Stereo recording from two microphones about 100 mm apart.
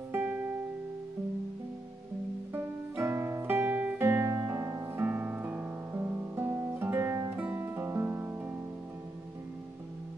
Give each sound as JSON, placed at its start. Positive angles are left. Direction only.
{"t": 2.5, "sound": "music", "side_deg": -25}
{"t": 5.0, "sound": "music", "side_deg": -15}